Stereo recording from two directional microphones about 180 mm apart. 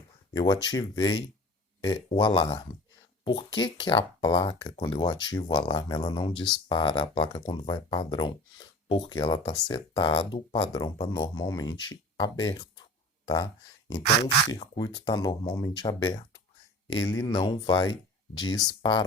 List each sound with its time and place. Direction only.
0.3 s speech: 20° left (ahead or behind)
3.6 s speech: 25° left (ahead or behind)
14.5 s speech: 25° left (ahead or behind)